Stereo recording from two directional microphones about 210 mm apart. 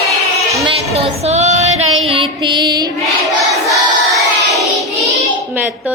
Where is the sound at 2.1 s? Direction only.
25° right (ahead or behind).